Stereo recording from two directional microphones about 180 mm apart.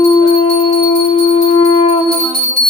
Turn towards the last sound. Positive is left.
turn(degrees=35)  # may be behind; listen again after turning